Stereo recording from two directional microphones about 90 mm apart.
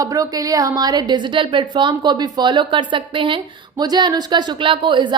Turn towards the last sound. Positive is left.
turn(degrees=-60)  # may be behind; listen again after turning